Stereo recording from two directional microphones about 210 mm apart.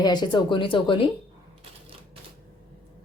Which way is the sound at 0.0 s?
20° left (ahead or behind).